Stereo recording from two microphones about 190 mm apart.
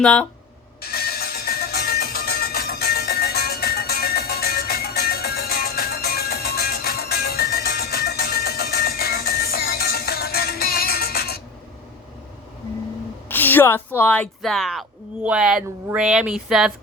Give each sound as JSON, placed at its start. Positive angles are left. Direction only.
{"t": 0.0, "sound": "speech", "side_deg": 5}
{"t": 0.8, "sound": "music", "side_deg": 55}
{"t": 13.2, "sound": "a woman's voice", "side_deg": 10}